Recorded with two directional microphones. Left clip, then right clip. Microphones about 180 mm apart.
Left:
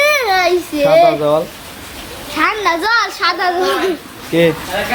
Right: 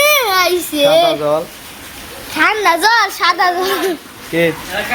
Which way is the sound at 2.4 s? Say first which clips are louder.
Right 3 dB; 55° right (ahead or behind).